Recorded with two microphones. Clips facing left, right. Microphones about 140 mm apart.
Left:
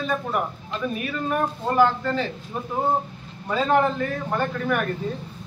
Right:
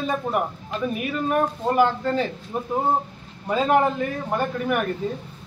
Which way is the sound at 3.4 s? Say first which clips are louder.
Right 1 dB; 15° right (ahead or behind).